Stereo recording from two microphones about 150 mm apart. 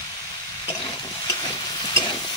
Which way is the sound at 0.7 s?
25° left (ahead or behind).